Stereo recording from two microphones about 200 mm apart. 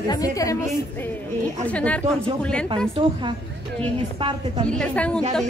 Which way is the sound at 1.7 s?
5° left (ahead or behind).